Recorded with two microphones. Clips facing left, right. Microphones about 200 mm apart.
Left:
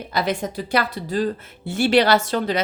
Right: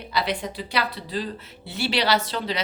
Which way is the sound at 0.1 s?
45° left (ahead or behind).